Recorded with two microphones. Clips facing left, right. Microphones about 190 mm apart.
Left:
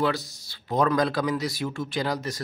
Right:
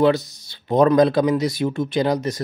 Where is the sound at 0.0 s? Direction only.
20° right (ahead or behind).